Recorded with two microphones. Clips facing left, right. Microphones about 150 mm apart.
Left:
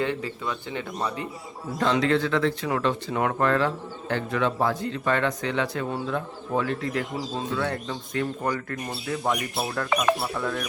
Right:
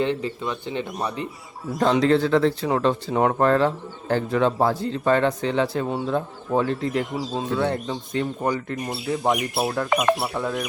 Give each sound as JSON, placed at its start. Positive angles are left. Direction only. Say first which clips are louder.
{"t": 0.0, "sound": "speech", "louder": "right 4 dB", "side_deg": -20}
{"t": 1.8, "sound": "speech", "louder": "right 4 dB", "side_deg": -35}